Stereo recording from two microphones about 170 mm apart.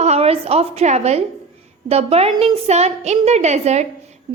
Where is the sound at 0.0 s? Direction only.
40° right (ahead or behind).